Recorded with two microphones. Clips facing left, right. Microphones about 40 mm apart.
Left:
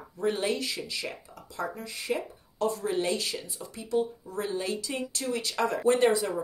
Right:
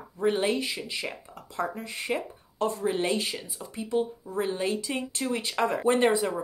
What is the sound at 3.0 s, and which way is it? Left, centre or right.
Speech, right.